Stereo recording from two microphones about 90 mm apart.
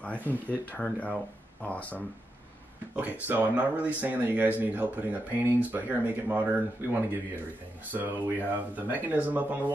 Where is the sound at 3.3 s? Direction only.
20° right (ahead or behind).